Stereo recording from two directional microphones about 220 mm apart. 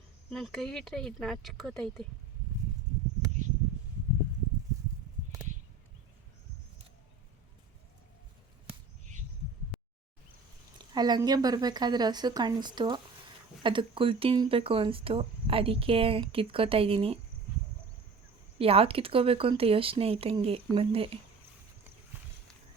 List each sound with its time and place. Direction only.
0.3 s speech: centre (ahead or behind)
9.7 s a sound: centre (ahead or behind)
10.8 s speech: 20° right (ahead or behind)
18.6 s speech: 25° right (ahead or behind)